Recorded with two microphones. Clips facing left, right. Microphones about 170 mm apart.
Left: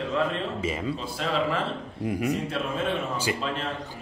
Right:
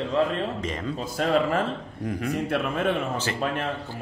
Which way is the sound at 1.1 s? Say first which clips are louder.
Right 5 dB; 45° right (ahead or behind).